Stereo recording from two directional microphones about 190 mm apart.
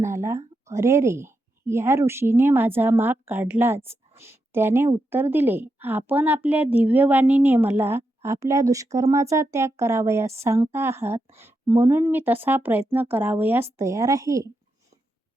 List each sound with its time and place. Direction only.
0.0 s a woman's voice: 15° right (ahead or behind)